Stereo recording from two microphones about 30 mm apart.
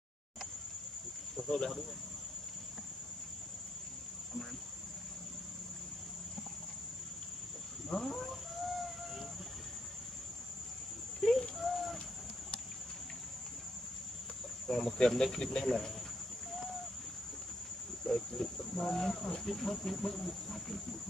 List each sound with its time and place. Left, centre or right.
7.9 s livestock: centre
11.1 s a sound: left
11.5 s bird: centre
14.7 s speech: centre
15.6 s speech: centre
18.0 s livestock: centre
19.4 s speech: centre